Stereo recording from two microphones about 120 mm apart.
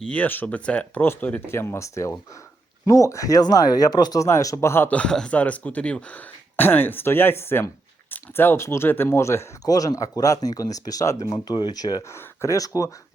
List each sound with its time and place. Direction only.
0.0 s speech: 10° left (ahead or behind); by 12.1 s 35° left (ahead or behind)
12.1 s speech: 20° left (ahead or behind)